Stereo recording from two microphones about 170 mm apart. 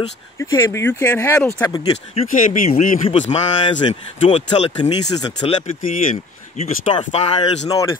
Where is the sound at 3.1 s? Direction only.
40° left (ahead or behind).